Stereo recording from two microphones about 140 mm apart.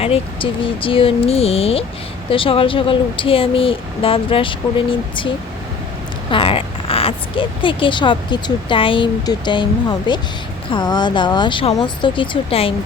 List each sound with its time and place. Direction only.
0.0 s speech: 40° left (ahead or behind)
6.3 s speech: 40° left (ahead or behind)